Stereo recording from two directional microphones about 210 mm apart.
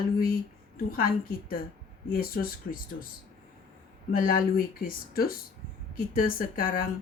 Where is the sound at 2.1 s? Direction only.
45° left (ahead or behind).